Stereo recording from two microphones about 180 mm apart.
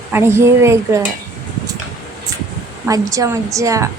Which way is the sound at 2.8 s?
20° right (ahead or behind).